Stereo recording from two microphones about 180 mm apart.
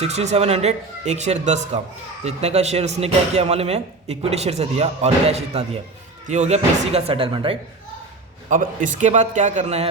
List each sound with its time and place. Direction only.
0.0 s a man's voice: 35° right (ahead or behind)
8.4 s a man's voice: 45° right (ahead or behind)